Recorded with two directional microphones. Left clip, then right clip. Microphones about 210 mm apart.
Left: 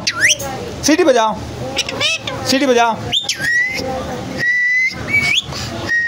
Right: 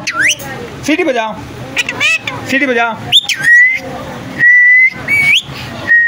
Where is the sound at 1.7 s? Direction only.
20° left (ahead or behind).